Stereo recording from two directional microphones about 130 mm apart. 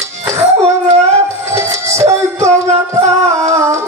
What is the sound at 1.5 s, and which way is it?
Music, 20° right (ahead or behind).